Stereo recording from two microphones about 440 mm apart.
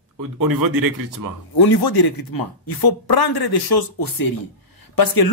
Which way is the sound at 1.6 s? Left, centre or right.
Left.